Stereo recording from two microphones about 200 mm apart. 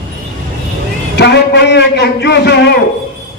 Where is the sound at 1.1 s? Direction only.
55° left (ahead or behind).